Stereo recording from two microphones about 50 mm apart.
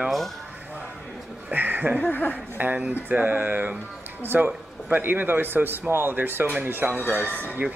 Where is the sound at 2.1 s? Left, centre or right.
Left.